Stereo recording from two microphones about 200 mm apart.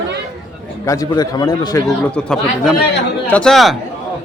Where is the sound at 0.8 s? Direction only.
15° left (ahead or behind).